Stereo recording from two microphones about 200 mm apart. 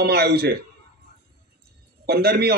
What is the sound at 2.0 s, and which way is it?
Speech, 50° right (ahead or behind).